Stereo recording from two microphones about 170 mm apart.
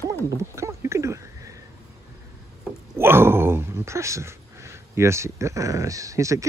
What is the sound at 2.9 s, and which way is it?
Speech, 15° right (ahead or behind).